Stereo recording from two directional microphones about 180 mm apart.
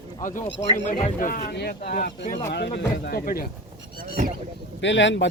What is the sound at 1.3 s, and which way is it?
Speech, 60° left (ahead or behind).